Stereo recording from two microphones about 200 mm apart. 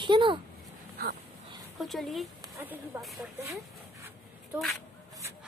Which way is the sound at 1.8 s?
Centre (ahead or behind).